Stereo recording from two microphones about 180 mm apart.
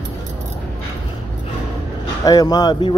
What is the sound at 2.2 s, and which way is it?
Speech, 20° left (ahead or behind).